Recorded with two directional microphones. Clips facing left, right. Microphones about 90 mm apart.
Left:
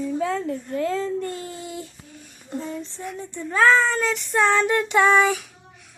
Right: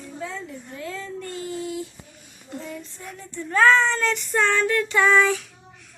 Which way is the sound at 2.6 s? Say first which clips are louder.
Left 5 dB; 30° left (ahead or behind).